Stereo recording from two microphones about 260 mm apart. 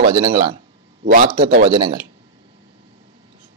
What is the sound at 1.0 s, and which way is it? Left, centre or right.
Speech, right.